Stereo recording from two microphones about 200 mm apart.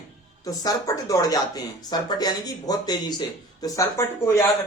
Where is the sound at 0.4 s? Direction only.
15° left (ahead or behind).